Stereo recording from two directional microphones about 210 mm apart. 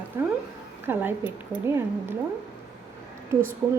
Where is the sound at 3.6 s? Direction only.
10° right (ahead or behind).